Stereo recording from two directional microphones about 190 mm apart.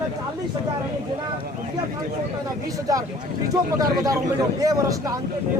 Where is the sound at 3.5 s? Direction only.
20° right (ahead or behind).